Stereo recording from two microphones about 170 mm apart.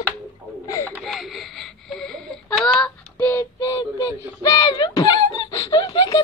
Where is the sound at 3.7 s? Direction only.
25° left (ahead or behind).